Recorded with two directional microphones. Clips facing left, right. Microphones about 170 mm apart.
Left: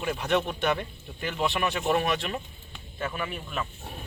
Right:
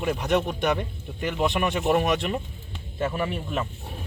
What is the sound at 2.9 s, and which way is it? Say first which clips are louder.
Speech: right 6 dB; 30° right (ahead or behind).